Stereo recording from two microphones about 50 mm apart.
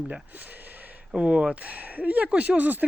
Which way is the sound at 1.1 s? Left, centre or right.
Right.